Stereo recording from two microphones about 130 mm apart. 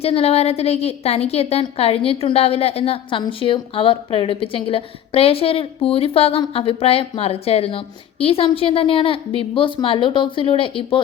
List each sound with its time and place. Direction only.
0.0 s a woman's voice: 50° left (ahead or behind)